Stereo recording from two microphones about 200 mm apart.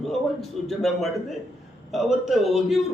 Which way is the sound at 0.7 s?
Centre (ahead or behind).